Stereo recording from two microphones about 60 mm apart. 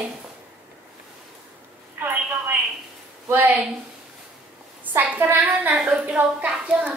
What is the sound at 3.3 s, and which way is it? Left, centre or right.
Speech, right.